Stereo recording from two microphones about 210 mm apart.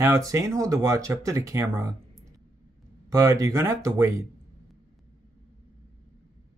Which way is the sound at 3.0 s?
15° right (ahead or behind).